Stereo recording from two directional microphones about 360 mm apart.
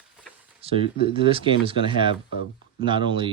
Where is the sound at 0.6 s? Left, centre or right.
Centre.